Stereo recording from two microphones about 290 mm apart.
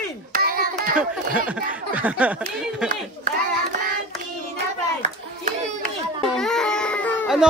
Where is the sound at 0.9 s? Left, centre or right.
Centre.